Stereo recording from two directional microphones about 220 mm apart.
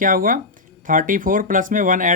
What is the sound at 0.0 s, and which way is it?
Speech, 40° right (ahead or behind).